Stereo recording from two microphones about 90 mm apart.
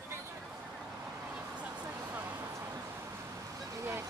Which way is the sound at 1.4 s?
20° right (ahead or behind).